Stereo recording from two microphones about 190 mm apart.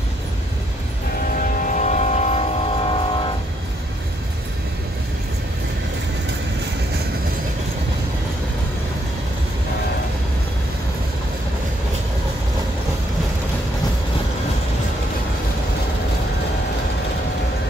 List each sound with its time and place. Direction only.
1.3 s music: 45° left (ahead or behind); by 3.3 s 25° left (ahead or behind)